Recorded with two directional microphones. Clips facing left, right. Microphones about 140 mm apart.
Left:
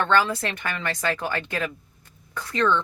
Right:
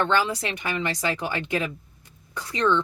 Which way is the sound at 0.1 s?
15° right (ahead or behind).